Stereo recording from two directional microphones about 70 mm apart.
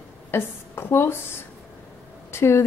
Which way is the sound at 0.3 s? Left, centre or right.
Left.